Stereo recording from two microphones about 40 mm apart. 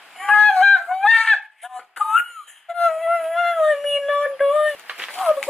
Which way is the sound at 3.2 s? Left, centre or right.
Centre.